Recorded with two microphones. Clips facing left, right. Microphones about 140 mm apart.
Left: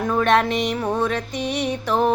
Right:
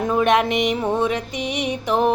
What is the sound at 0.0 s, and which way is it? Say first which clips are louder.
Music: right 1 dB; 15° right (ahead or behind).